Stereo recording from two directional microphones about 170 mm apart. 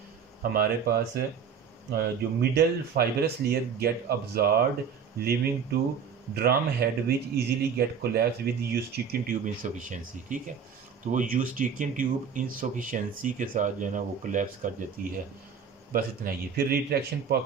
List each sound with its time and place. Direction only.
0.4 s speech: 60° right (ahead or behind)
2.5 s speech: 70° right (ahead or behind); by 14.7 s 50° right (ahead or behind)
15.9 s speech: 60° right (ahead or behind)